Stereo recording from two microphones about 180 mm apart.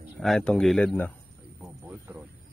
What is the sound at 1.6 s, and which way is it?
Music, 10° right (ahead or behind).